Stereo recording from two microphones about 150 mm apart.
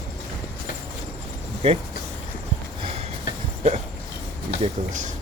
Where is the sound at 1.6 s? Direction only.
40° right (ahead or behind).